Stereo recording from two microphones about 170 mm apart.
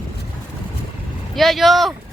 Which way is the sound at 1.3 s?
Centre (ahead or behind).